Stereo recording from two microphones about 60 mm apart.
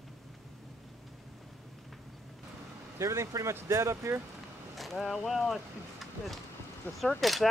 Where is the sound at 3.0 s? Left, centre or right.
Right.